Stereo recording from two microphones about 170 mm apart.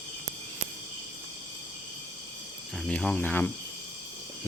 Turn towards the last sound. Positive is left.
turn(degrees=10)  # may be behind; listen again after turning